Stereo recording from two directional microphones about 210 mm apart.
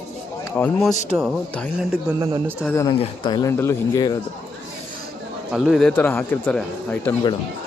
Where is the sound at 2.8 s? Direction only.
20° left (ahead or behind).